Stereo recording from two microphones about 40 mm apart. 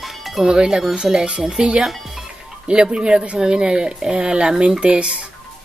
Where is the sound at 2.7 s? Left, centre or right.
Right.